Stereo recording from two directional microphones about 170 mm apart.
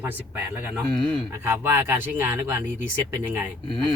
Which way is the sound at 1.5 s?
15° right (ahead or behind).